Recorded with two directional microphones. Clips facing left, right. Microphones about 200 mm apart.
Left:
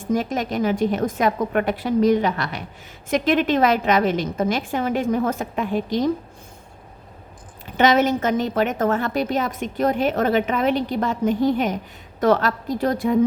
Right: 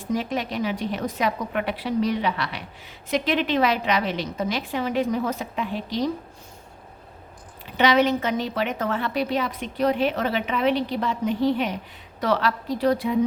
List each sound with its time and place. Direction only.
0.0 s a woman's voice: 45° left (ahead or behind)
7.8 s a woman's voice: 45° left (ahead or behind)